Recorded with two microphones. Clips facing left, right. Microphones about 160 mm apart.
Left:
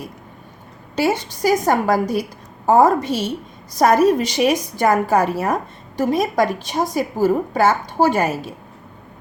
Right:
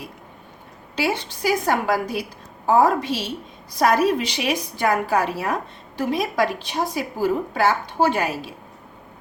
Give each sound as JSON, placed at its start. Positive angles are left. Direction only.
{"t": 0.9, "sound": "a woman's voice", "side_deg": 45}